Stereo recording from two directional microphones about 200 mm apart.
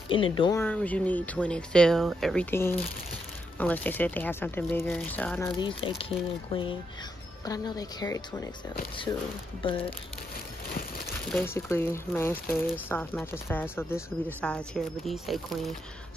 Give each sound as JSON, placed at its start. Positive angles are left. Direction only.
{"t": 0.1, "sound": "speech", "side_deg": 25}
{"t": 0.7, "sound": "speech", "side_deg": 5}
{"t": 2.5, "sound": "speech", "side_deg": 10}
{"t": 5.6, "sound": "speech", "side_deg": 25}
{"t": 9.6, "sound": "speech", "side_deg": 25}
{"t": 11.3, "sound": "speech", "side_deg": 10}